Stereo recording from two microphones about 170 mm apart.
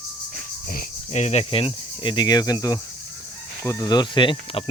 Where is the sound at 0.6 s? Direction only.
55° left (ahead or behind).